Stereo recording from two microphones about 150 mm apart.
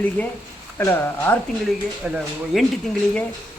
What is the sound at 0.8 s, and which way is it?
Speech, 15° left (ahead or behind).